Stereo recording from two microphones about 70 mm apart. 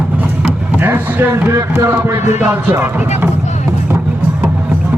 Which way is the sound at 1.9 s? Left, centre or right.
Right.